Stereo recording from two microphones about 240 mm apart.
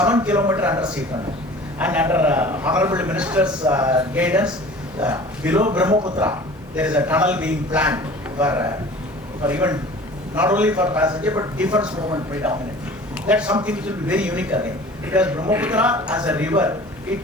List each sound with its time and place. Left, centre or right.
0.0 s a man's voice: centre